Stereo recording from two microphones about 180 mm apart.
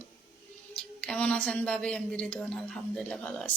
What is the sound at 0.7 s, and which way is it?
A woman's voice, 5° left (ahead or behind).